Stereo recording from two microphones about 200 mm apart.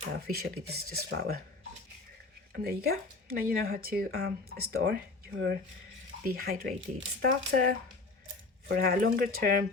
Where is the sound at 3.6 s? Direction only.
50° right (ahead or behind).